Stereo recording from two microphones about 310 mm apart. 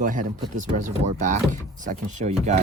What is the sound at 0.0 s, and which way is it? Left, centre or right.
Speech, right.